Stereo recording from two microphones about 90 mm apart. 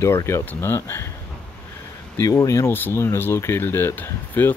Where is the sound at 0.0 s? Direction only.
30° left (ahead or behind).